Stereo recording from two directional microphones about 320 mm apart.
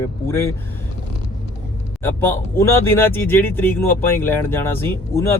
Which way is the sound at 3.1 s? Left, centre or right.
Centre.